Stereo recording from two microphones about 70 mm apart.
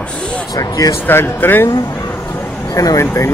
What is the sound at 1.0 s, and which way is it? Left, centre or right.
Speech, left.